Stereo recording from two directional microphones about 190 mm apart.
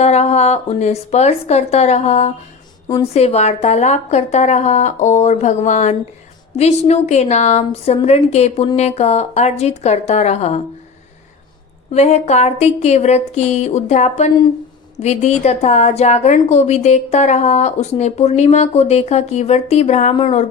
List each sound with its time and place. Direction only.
0.0 s a woman's voice: 35° left (ahead or behind)
2.8 s a woman's voice: 20° left (ahead or behind)
3.1 s a woman's voice: 35° left (ahead or behind)
11.9 s a woman's voice: 35° left (ahead or behind)